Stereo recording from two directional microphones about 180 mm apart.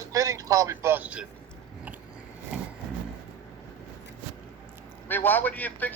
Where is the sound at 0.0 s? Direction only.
20° right (ahead or behind).